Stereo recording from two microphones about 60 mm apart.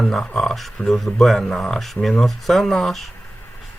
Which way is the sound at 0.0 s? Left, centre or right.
Centre.